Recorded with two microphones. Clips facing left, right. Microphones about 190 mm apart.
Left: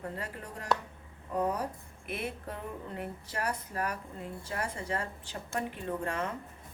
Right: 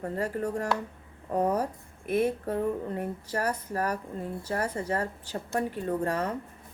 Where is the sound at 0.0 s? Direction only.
45° right (ahead or behind).